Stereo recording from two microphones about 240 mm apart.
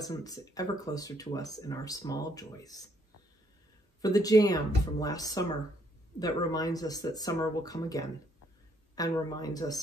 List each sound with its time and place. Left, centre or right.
0.1 s speech: centre
4.0 s speech: centre